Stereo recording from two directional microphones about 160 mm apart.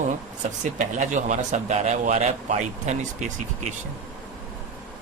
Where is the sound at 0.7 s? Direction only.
50° right (ahead or behind).